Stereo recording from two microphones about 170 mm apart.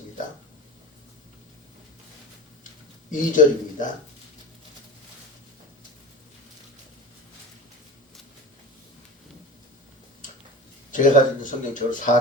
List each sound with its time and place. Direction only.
3.1 s speech: 50° left (ahead or behind)
10.9 s speech: 50° left (ahead or behind)